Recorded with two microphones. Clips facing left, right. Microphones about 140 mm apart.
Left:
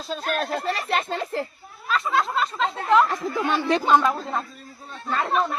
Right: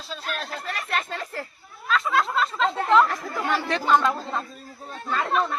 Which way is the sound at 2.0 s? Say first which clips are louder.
Left 1 dB; centre (ahead or behind).